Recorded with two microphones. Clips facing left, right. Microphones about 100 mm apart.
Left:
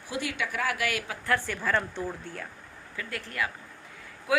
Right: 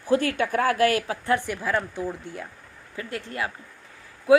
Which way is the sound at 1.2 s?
20° right (ahead or behind).